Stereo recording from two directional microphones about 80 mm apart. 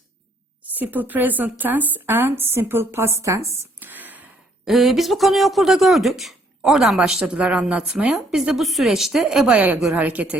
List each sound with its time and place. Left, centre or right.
0.7 s speech: right
3.8 s whispering: right
4.6 s speech: centre
8.4 s speech: centre
9.9 s speech: centre